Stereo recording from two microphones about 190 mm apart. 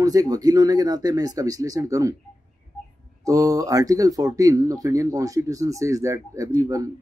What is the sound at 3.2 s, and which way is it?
Speech, 20° right (ahead or behind).